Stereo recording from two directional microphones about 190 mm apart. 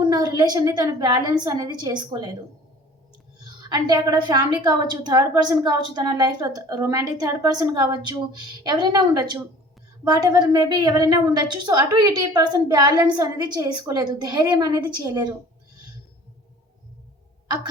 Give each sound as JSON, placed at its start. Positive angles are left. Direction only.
{"t": 0.0, "sound": "a woman's voice", "side_deg": -20}
{"t": 3.7, "sound": "a woman's voice", "side_deg": -20}